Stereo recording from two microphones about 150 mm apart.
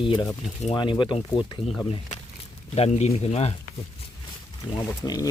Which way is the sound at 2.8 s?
45° left (ahead or behind).